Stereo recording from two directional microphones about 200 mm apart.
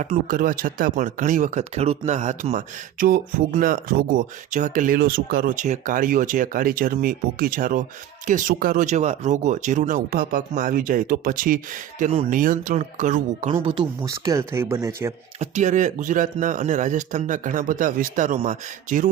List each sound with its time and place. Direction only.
0.0 s speech: 40° right (ahead or behind)
13.5 s speech: 25° right (ahead or behind)
15.4 s speech: 35° right (ahead or behind)